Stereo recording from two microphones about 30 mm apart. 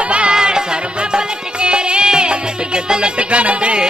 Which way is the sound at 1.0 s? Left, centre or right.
Right.